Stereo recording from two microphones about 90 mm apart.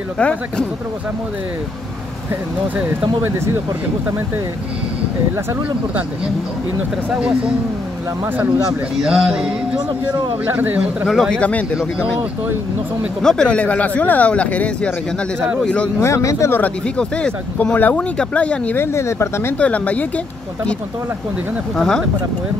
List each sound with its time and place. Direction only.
0.2 s speech: 10° left (ahead or behind)
7.1 s speech: 15° right (ahead or behind)
9.0 s speech: 10° right (ahead or behind)
10.4 s a man's voice: 20° right (ahead or behind)
11.1 s speech: 5° left (ahead or behind)
13.2 s speech: 10° left (ahead or behind)
16.0 s speech: 35° left (ahead or behind)
16.5 s speech: 15° left (ahead or behind)
18.8 s speech: 30° left (ahead or behind)
19.6 s speech: 15° left (ahead or behind)
21.7 s speech: 5° left (ahead or behind)